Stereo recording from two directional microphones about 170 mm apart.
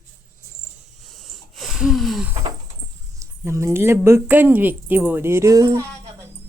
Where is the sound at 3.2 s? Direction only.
15° right (ahead or behind).